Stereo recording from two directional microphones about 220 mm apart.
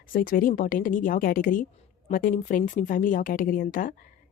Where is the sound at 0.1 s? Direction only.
40° left (ahead or behind).